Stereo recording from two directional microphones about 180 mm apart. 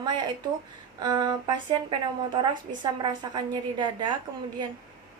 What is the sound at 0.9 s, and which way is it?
Speech, 25° right (ahead or behind).